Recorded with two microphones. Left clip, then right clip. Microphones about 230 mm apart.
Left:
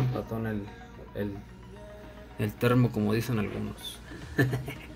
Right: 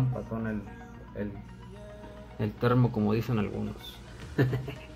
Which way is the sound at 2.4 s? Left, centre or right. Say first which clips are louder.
Left 1 dB; centre.